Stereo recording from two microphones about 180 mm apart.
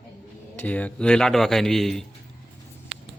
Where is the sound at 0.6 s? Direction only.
10° left (ahead or behind).